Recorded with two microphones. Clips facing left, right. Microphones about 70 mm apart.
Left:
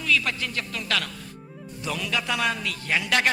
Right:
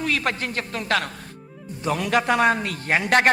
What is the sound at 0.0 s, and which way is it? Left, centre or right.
A man's voice, right.